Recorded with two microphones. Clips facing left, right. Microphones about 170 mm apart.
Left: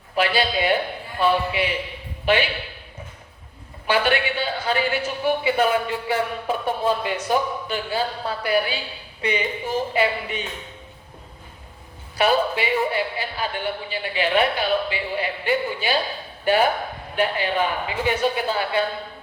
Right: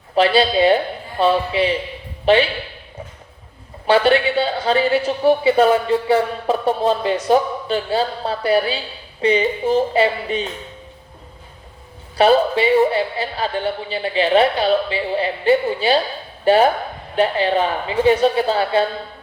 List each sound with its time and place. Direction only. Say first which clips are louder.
0.2 s a woman's voice: right 7 dB; 30° right (ahead or behind)
3.8 s a woman's voice: right 7 dB; 30° right (ahead or behind)
12.1 s a woman's voice: right 6 dB; 30° right (ahead or behind)